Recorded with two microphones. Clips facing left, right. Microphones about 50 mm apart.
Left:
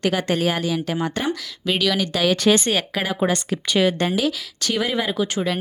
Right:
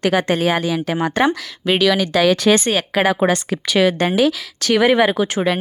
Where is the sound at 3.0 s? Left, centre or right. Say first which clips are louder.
Right 5 dB; right.